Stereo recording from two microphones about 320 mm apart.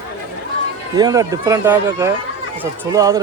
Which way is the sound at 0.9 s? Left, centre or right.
Centre.